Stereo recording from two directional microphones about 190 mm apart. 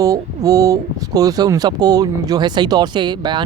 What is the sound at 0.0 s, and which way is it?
Speech, 20° right (ahead or behind).